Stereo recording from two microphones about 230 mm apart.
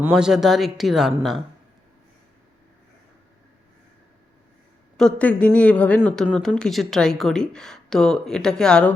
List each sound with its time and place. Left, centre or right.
0.0 s speech: centre
4.9 s speech: centre